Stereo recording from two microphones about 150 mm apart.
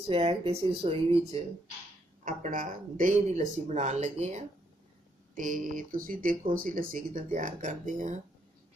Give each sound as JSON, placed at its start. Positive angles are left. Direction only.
{"t": 0.0, "sound": "speech", "side_deg": -40}
{"t": 2.2, "sound": "speech", "side_deg": -60}
{"t": 5.3, "sound": "speech", "side_deg": -60}